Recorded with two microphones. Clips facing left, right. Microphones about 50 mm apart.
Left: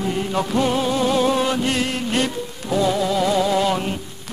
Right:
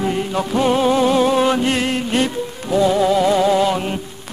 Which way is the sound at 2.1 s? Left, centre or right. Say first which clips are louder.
Right 3 dB; centre.